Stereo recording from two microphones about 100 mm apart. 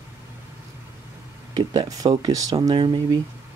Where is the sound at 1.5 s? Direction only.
40° right (ahead or behind).